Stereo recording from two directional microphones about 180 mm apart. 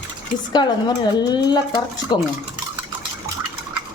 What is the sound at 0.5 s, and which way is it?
Speech, 25° left (ahead or behind).